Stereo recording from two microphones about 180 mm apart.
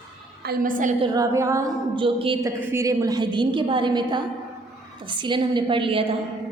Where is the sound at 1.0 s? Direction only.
20° right (ahead or behind).